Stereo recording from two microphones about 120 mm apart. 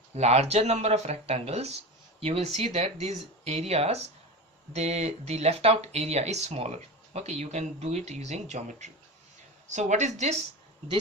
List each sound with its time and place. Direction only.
0.1 s speech: 65° right (ahead or behind)